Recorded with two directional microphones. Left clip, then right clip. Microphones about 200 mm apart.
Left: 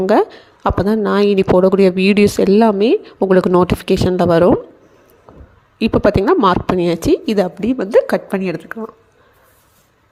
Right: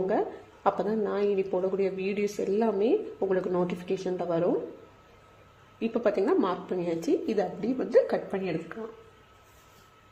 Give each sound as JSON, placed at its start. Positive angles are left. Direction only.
{"t": 0.1, "sound": "speech", "side_deg": 40}
{"t": 5.8, "sound": "speech", "side_deg": 45}